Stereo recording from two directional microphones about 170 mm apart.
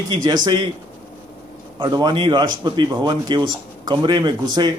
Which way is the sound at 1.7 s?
25° right (ahead or behind).